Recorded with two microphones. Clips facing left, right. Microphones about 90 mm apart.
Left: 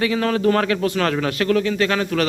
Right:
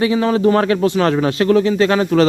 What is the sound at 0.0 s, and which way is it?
A man's voice, 20° right (ahead or behind).